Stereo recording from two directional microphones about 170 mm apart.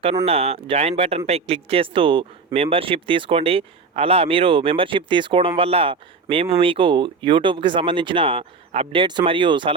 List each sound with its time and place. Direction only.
0.3 s speech: 35° right (ahead or behind)